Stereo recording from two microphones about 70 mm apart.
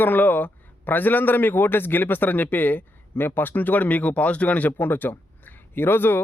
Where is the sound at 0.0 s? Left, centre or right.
Left.